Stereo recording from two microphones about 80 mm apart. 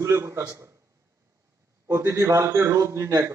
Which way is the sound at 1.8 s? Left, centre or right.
Right.